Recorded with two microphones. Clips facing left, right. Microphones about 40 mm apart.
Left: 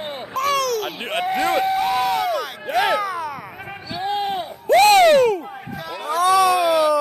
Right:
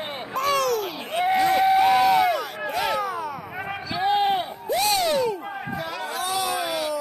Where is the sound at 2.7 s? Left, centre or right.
Left.